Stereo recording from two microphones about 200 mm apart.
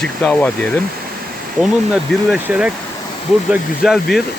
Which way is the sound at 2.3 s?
5° right (ahead or behind).